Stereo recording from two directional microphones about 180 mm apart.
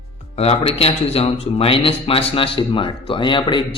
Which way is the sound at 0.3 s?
35° left (ahead or behind).